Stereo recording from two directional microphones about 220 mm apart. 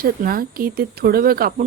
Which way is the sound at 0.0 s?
40° right (ahead or behind).